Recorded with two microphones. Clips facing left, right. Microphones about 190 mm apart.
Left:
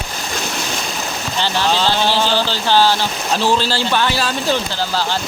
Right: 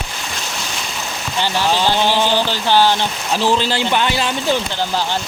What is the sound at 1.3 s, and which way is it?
Speech, 15° right (ahead or behind).